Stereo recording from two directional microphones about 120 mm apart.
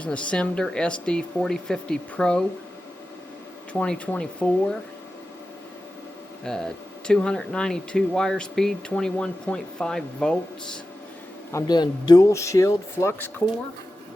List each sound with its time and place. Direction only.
0.0 s speech: 10° left (ahead or behind)
3.7 s speech: 10° left (ahead or behind)
6.4 s speech: 5° left (ahead or behind)
11.5 s a man's voice: 35° left (ahead or behind); by 13.3 s 20° left (ahead or behind)